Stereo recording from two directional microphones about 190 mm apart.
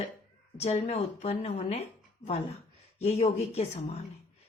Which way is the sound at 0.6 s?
35° left (ahead or behind).